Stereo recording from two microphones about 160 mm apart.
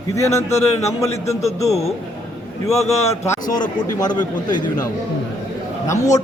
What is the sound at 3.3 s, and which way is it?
A man's voice, 25° left (ahead or behind).